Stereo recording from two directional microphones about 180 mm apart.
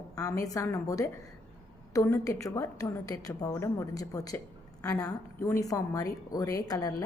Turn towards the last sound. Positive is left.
turn(degrees=20)  # may be behind; listen again after turning